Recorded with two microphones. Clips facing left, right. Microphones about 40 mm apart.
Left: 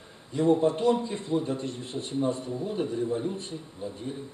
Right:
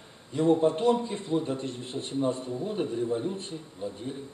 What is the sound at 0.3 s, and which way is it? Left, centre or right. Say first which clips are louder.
A man's voice: even; centre.